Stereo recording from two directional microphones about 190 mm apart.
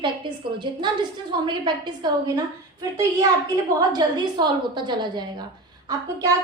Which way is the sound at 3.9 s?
20° right (ahead or behind).